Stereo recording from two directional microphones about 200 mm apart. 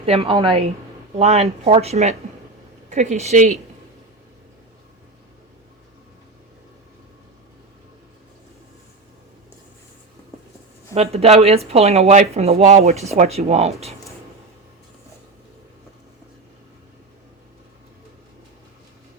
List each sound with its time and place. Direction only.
0.0 s speech: 30° right (ahead or behind)
10.9 s speech: 30° right (ahead or behind)